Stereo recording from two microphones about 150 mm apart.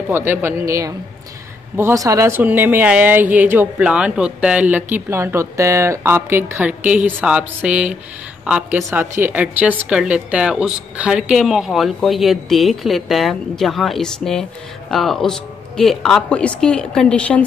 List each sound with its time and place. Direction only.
0.1 s a woman's voice: 15° right (ahead or behind); by 17.5 s 10° left (ahead or behind)